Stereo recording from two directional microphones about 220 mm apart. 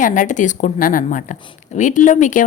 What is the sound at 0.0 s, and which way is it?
Speech, 35° left (ahead or behind).